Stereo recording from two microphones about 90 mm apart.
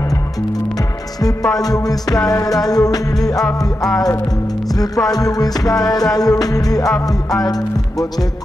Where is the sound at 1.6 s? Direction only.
45° left (ahead or behind).